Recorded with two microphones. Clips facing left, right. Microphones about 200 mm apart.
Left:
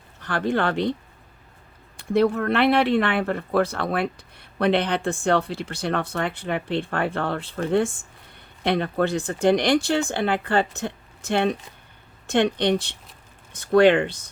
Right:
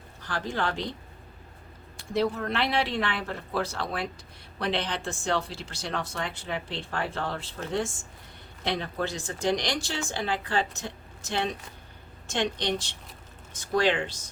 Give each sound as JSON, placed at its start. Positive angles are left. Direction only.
{"t": 0.2, "sound": "speech", "side_deg": 60}
{"t": 2.1, "sound": "speech", "side_deg": 60}